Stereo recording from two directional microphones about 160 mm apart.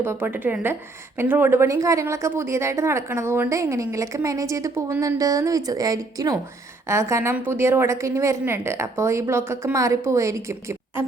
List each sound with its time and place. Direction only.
0.0 s a woman's voice: 15° right (ahead or behind)